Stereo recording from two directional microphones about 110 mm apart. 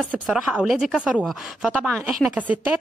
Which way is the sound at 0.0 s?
10° right (ahead or behind).